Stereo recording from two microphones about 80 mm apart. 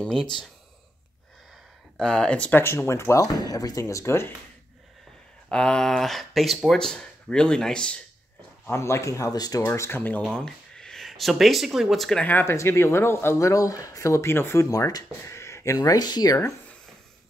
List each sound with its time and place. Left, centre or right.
0.0 s speech: centre
2.0 s speech: centre
2.6 s speech: left
3.3 s speech: left
5.5 s speech: centre
8.7 s speech: left
9.6 s speech: left
10.3 s speech: centre
12.2 s speech: left
12.4 s speech: left
14.7 s speech: left
15.2 s speech: left